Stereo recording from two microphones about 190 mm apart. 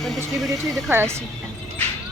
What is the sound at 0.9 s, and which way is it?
Speech, 15° right (ahead or behind).